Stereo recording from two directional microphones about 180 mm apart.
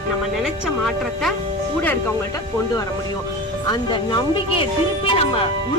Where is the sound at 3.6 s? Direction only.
25° left (ahead or behind).